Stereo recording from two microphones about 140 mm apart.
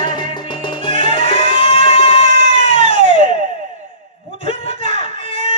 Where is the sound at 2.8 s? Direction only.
60° right (ahead or behind).